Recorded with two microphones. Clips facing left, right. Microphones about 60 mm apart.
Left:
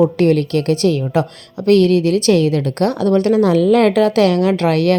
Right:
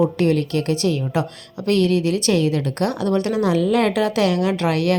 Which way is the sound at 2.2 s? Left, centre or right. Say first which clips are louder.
Left 5 dB; left.